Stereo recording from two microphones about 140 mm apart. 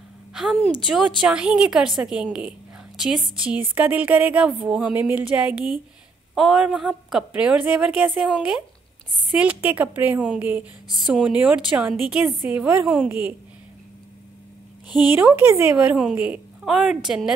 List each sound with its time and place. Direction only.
0.3 s a sound: centre (ahead or behind)
0.7 s a woman's voice: 5° right (ahead or behind)
15.1 s a woman's voice: 15° right (ahead or behind)